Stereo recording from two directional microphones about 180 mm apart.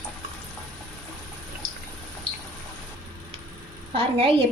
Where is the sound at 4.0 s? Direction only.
30° right (ahead or behind).